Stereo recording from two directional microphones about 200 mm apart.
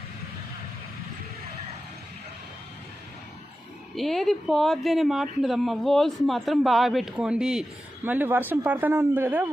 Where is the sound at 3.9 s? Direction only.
Centre (ahead or behind).